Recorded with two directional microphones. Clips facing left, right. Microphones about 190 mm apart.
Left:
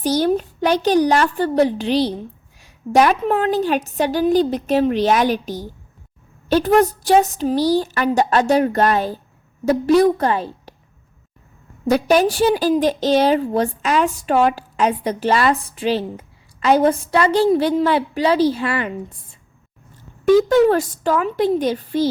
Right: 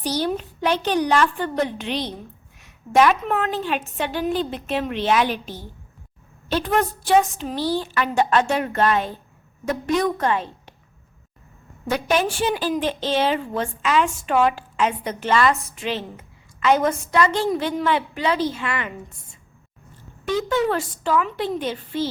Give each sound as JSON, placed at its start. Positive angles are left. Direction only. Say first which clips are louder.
{"t": 0.0, "sound": "a woman's voice", "louder": "left 6 dB", "side_deg": 45}
{"t": 11.9, "sound": "a woman's voice", "louder": "left 6 dB", "side_deg": 40}
{"t": 20.2, "sound": "a woman's voice", "louder": "left 9 dB", "side_deg": 45}